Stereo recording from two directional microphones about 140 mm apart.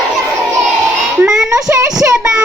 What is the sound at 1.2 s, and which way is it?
Child singing, 5° right (ahead or behind).